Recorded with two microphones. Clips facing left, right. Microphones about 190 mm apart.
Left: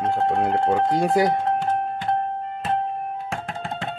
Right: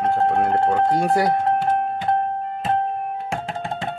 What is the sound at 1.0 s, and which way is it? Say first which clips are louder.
Speech: even; 20° left (ahead or behind).